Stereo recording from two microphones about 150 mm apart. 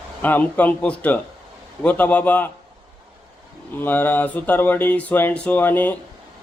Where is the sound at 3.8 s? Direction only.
15° left (ahead or behind).